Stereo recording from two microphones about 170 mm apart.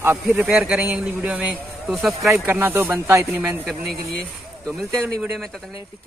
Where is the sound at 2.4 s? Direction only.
10° right (ahead or behind).